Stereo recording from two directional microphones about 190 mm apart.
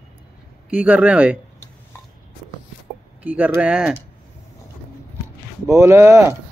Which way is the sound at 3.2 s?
10° right (ahead or behind).